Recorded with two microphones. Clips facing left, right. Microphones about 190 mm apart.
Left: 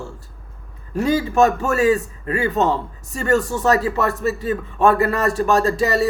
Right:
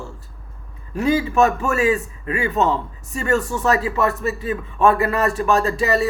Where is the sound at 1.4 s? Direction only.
35° left (ahead or behind).